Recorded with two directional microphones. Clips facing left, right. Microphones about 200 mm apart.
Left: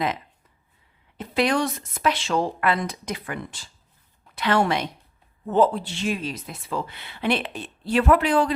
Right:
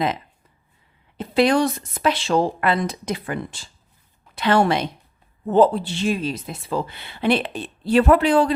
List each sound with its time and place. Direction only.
1.2 s speech: 30° right (ahead or behind)